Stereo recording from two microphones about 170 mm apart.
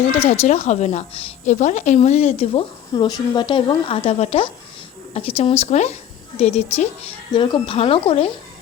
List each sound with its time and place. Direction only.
0.1 s a woman's voice: 40° left (ahead or behind)